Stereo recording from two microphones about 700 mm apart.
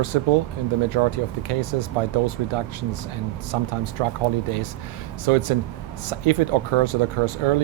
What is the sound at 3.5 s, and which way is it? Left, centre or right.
Speech, right.